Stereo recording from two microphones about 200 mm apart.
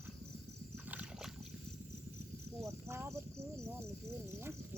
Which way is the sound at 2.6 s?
15° right (ahead or behind).